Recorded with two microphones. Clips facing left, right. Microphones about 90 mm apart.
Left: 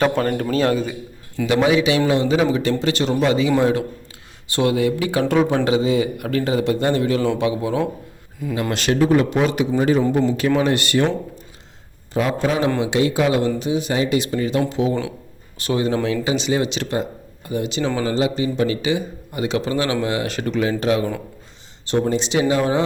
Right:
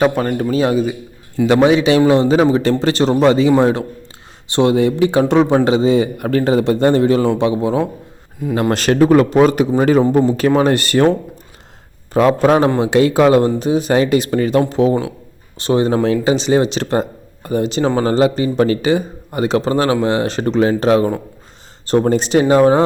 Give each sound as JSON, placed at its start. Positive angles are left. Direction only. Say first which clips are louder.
{"t": 0.0, "sound": "a man's voice", "louder": "right 3 dB", "side_deg": -15}
{"t": 1.5, "sound": "speech", "louder": "right 5 dB", "side_deg": -35}
{"t": 8.7, "sound": "speech", "louder": "right 5 dB", "side_deg": -45}
{"t": 12.1, "sound": "speech", "louder": "right 8 dB", "side_deg": -55}
{"t": 14.7, "sound": "speech", "louder": "right 6 dB", "side_deg": -40}